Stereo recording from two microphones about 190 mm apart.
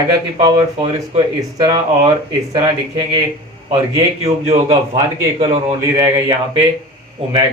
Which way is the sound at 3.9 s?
30° right (ahead or behind).